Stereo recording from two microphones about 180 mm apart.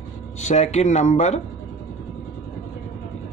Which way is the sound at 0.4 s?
40° left (ahead or behind).